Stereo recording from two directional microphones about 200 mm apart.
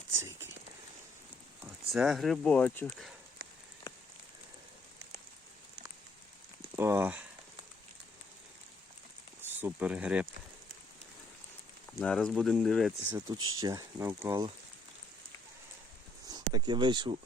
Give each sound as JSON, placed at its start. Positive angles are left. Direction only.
{"t": 0.2, "sound": "speech", "side_deg": -10}
{"t": 1.9, "sound": "speech", "side_deg": 0}
{"t": 6.7, "sound": "speech", "side_deg": -10}
{"t": 9.5, "sound": "speech", "side_deg": -10}
{"t": 11.9, "sound": "speech", "side_deg": 5}
{"t": 13.1, "sound": "speech", "side_deg": -20}
{"t": 16.3, "sound": "speech", "side_deg": -20}